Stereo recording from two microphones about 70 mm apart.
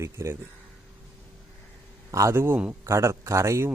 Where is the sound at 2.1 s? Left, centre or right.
Right.